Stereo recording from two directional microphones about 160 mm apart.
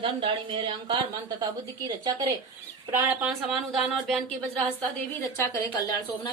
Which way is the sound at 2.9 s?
10° right (ahead or behind).